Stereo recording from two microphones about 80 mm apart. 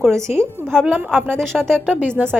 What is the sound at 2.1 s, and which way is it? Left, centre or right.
Speech, right.